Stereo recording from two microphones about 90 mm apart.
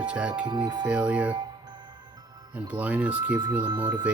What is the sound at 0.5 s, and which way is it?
Speech, 55° right (ahead or behind).